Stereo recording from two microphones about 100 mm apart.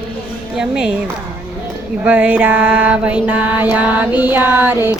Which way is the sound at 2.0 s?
15° right (ahead or behind).